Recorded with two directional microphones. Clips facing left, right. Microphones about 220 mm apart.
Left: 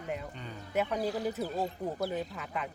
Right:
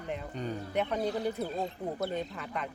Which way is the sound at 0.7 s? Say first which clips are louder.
Left 1 dB; 5° left (ahead or behind).